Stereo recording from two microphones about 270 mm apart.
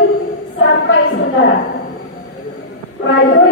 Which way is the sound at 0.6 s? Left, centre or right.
Left.